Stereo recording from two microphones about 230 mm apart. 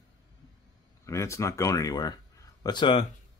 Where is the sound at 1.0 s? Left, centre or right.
Centre.